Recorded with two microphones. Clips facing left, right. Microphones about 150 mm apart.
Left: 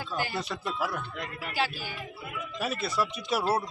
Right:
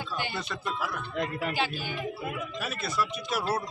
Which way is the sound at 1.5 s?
5° left (ahead or behind).